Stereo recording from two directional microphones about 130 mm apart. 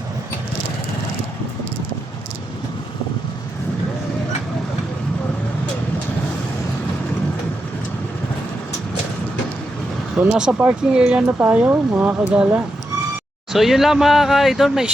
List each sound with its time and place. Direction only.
10.2 s speech: 5° right (ahead or behind)
13.5 s speech: centre (ahead or behind)